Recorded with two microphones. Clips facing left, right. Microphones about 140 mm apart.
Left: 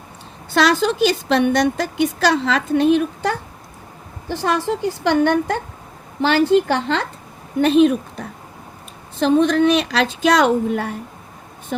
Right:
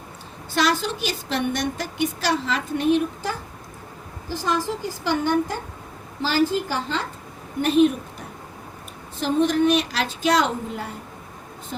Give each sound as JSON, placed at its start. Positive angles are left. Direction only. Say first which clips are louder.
{"t": 0.5, "sound": "a woman's voice", "louder": "left 6 dB", "side_deg": 85}
{"t": 4.3, "sound": "a woman's voice", "louder": "left 5 dB", "side_deg": 60}
{"t": 7.6, "sound": "a woman's voice", "louder": "left 4 dB", "side_deg": 90}
{"t": 9.2, "sound": "a woman's voice", "louder": "left 5 dB", "side_deg": 85}